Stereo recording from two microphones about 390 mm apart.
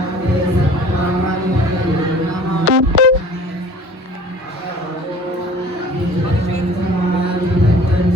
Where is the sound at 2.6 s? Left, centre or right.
Right.